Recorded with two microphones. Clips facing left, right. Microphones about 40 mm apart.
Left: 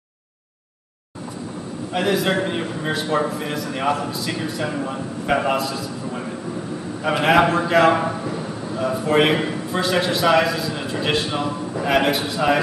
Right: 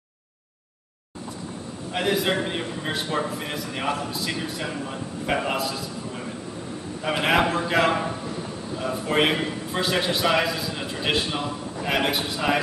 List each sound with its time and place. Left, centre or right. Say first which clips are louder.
2.0 s a man's voice: left 3 dB; centre
4.7 s a man's voice: left 5 dB; centre
7.1 s a man's voice: left 5 dB; centre
8.0 s a sound: left 5 dB; centre
8.7 s a man's voice: left 5 dB; centre